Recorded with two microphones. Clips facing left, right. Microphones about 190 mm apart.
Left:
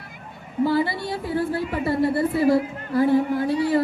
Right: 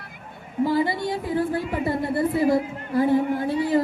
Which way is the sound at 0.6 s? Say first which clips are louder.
Even; 20° right (ahead or behind).